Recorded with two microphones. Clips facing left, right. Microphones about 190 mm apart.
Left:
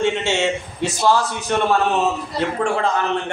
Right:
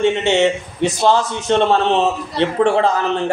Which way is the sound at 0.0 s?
20° right (ahead or behind).